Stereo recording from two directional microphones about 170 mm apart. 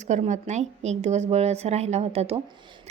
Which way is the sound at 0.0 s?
45° right (ahead or behind).